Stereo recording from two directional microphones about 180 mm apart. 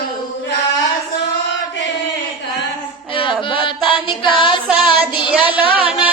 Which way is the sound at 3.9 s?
25° left (ahead or behind).